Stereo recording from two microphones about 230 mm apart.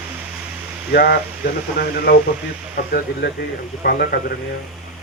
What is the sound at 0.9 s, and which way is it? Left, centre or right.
Speech, left.